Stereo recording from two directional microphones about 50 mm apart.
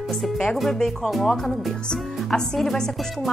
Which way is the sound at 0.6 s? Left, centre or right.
Centre.